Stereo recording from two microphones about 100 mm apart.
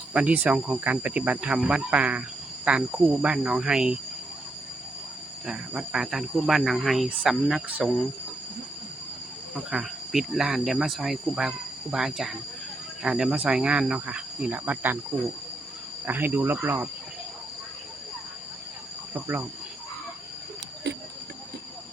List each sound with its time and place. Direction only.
0.1 s speech: 15° right (ahead or behind)
5.5 s speech: 5° right (ahead or behind)
9.6 s speech: 5° right (ahead or behind)
16.0 s speech: 20° right (ahead or behind)
19.1 s speech: 20° right (ahead or behind)